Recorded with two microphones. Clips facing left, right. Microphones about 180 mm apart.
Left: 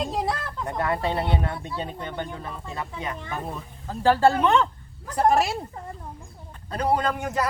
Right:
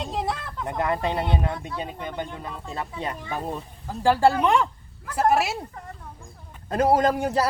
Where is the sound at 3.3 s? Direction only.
35° right (ahead or behind).